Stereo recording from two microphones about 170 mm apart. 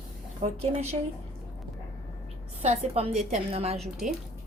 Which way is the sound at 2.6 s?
40° right (ahead or behind).